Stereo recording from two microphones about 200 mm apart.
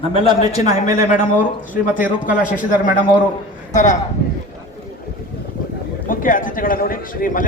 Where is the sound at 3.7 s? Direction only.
35° left (ahead or behind).